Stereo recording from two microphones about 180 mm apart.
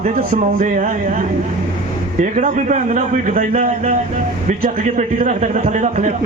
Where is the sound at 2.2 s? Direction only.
45° right (ahead or behind).